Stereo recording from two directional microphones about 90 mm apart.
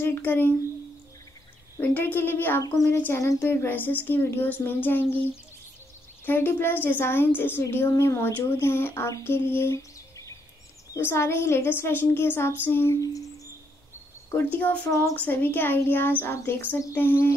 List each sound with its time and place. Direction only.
0.0 s speech: 25° left (ahead or behind)
1.8 s speech: 20° left (ahead or behind)
2.6 s speech: 40° left (ahead or behind)
3.4 s speech: 25° left (ahead or behind)
6.2 s speech: 25° left (ahead or behind)
11.0 s speech: 25° left (ahead or behind)
13.0 s speech: 40° left (ahead or behind)
14.3 s speech: 20° left (ahead or behind)